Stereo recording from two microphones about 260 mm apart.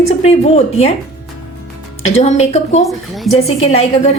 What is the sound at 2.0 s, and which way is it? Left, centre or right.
Speech, left.